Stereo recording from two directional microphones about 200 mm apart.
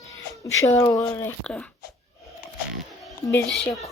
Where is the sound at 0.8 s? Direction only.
15° left (ahead or behind).